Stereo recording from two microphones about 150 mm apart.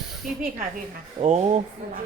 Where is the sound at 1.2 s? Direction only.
45° right (ahead or behind).